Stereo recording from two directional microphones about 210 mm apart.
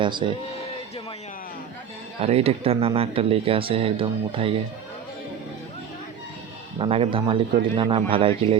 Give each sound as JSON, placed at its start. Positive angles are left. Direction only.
{"t": 0.0, "sound": "speech", "side_deg": -20}
{"t": 2.2, "sound": "speech", "side_deg": -30}
{"t": 6.7, "sound": "speech", "side_deg": -25}